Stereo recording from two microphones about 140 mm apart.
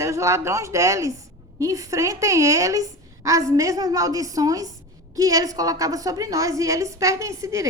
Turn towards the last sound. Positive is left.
turn(degrees=-25)  # may be behind; listen again after turning